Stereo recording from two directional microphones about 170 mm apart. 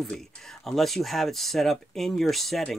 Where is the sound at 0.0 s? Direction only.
Centre (ahead or behind).